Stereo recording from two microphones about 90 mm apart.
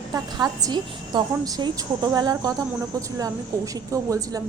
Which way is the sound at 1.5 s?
45° right (ahead or behind).